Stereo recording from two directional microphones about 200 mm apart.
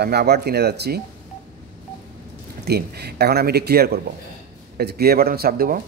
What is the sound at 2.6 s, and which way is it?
Speech, 55° right (ahead or behind).